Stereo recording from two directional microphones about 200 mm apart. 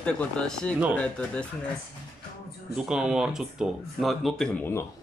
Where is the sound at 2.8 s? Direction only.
5° right (ahead or behind).